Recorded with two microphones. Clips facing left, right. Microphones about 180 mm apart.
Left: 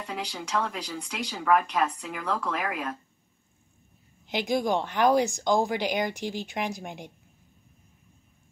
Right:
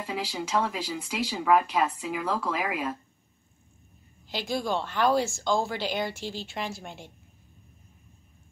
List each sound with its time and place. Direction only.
0.0 s speech: 5° right (ahead or behind)
4.3 s speech: 20° left (ahead or behind)